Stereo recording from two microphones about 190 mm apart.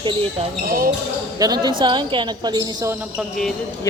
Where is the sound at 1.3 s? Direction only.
20° right (ahead or behind).